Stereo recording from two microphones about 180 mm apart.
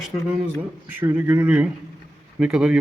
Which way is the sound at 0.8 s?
10° right (ahead or behind).